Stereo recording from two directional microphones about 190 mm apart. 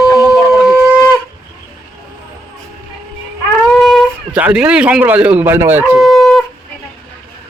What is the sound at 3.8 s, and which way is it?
Speech, centre (ahead or behind).